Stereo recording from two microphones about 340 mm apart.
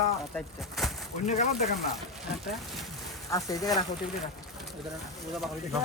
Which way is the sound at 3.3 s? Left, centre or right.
Centre.